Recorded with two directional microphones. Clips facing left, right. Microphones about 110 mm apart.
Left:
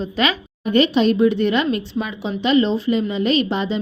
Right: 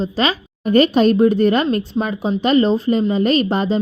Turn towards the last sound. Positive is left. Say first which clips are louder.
# right 3 dB
turn(degrees=-40)  # may be behind; listen again after turning